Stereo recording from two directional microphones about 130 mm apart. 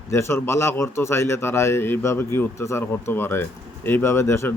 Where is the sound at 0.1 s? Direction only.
20° left (ahead or behind).